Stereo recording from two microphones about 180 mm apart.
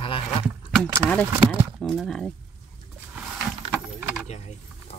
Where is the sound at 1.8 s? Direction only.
5° left (ahead or behind).